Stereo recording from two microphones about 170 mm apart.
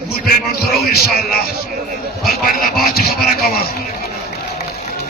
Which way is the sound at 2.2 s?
60° left (ahead or behind).